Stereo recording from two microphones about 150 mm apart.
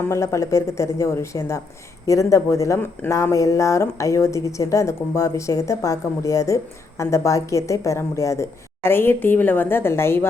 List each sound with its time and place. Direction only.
0.1 s speech: 20° left (ahead or behind)